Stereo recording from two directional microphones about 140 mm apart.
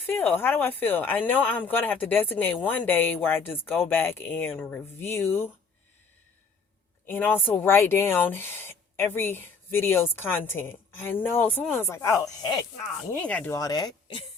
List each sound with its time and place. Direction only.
0.0 s speech: 15° left (ahead or behind)
7.0 s speech: 15° left (ahead or behind)
13.1 s speech: 10° left (ahead or behind)
13.5 s speech: 25° left (ahead or behind)